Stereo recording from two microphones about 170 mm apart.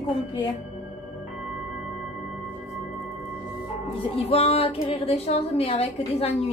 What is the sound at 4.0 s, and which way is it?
A woman's voice, 35° left (ahead or behind).